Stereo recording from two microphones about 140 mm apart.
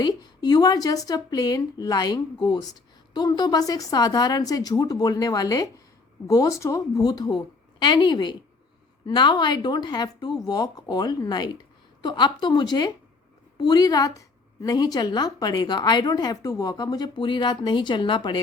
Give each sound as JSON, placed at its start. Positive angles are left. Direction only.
{"t": 0.0, "sound": "a woman's voice", "side_deg": 30}